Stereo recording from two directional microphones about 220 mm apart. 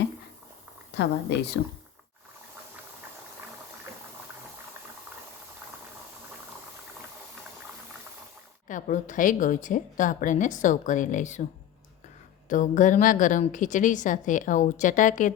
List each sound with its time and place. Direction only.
0.9 s speech: 50° left (ahead or behind)
8.6 s a woman's voice: 35° left (ahead or behind)
12.5 s a woman's voice: 35° left (ahead or behind)